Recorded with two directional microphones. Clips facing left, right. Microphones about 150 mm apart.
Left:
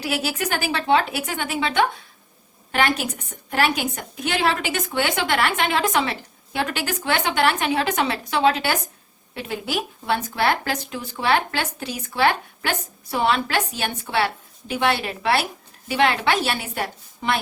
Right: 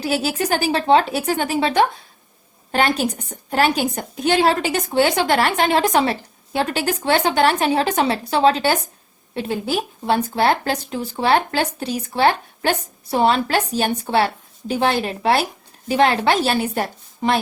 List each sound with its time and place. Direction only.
0.0 s speech: 35° right (ahead or behind)